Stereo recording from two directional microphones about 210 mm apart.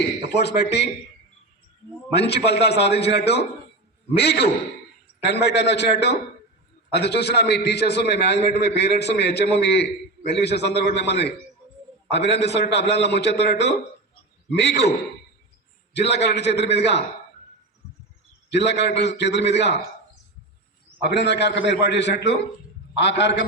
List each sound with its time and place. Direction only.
0.3 s a man's voice: 50° left (ahead or behind)
2.1 s a man's voice: 55° left (ahead or behind)
16.0 s a man's voice: 55° left (ahead or behind)
18.5 s a man's voice: 55° left (ahead or behind)
21.0 s a man's voice: 55° left (ahead or behind)